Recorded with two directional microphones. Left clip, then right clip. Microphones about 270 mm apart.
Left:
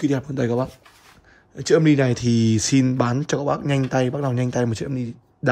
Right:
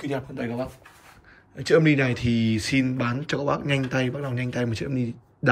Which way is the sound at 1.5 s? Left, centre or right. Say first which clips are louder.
Left 2 dB; centre.